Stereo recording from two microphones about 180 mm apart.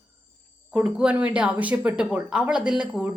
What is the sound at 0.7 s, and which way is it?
Speech, 5° right (ahead or behind).